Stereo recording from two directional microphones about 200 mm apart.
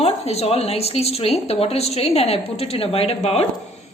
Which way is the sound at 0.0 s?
30° left (ahead or behind).